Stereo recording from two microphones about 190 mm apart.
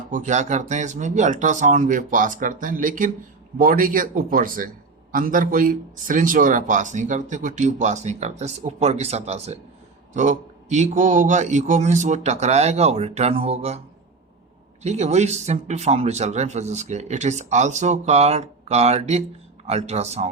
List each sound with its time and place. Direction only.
0.1 s speech: 40° right (ahead or behind)